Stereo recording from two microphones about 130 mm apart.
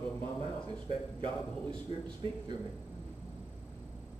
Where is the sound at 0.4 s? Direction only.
40° right (ahead or behind).